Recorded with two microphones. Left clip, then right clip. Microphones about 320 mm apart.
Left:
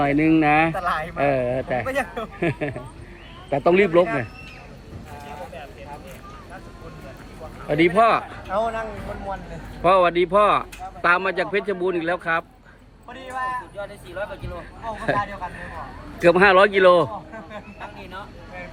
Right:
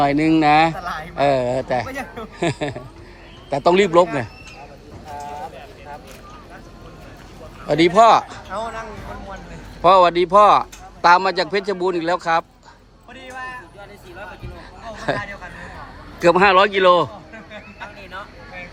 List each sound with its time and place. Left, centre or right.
0.0 s speech: centre
7.7 s speech: centre
8.4 s a sound: left
9.8 s speech: centre
13.1 s a sound: centre
16.2 s speech: centre